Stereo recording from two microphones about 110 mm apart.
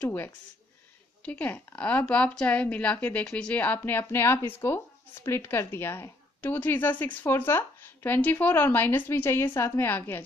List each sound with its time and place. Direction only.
0.0 s speech: 20° left (ahead or behind)